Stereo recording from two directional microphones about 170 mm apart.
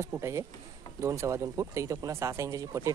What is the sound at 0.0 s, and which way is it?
Speech, 15° right (ahead or behind).